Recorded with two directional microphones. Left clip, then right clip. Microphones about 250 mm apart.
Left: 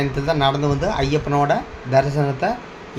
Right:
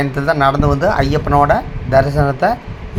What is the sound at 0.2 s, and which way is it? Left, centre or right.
Speech, centre.